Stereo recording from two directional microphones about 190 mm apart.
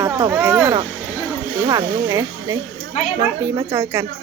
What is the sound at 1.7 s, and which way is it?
Speech, 15° right (ahead or behind).